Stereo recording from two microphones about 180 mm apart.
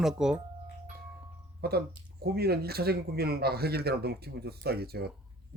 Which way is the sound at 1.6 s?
60° right (ahead or behind).